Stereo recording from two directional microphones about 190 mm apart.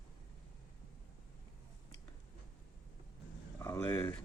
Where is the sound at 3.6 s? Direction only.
15° left (ahead or behind).